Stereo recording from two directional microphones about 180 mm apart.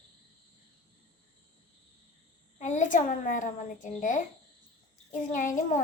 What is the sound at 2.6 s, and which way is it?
A child's voice, 45° left (ahead or behind).